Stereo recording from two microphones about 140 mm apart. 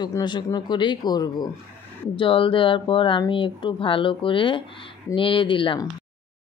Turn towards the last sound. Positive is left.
turn(degrees=35)  # may be behind; listen again after turning